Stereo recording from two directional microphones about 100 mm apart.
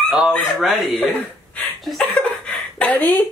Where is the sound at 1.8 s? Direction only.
Centre (ahead or behind).